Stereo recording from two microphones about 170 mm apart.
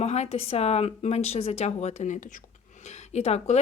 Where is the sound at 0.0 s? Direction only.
40° left (ahead or behind).